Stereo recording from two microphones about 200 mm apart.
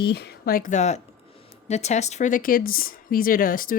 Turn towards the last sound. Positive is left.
turn(degrees=45)  # may be behind; listen again after turning